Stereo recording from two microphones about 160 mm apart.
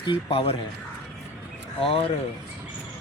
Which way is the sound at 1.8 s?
35° left (ahead or behind).